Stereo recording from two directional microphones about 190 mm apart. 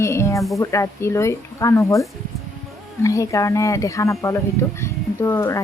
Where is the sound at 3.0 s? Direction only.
15° left (ahead or behind).